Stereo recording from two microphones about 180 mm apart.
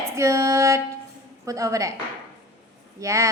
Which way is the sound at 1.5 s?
15° right (ahead or behind).